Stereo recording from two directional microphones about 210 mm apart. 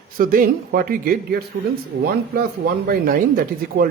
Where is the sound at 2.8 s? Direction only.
45° right (ahead or behind).